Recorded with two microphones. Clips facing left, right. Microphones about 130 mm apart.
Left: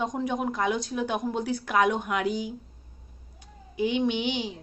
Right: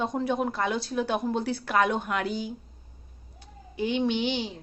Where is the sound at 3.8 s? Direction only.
15° left (ahead or behind).